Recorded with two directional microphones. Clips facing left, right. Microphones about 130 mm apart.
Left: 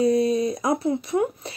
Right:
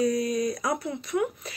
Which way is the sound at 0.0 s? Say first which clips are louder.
Left 5 dB; 30° left (ahead or behind).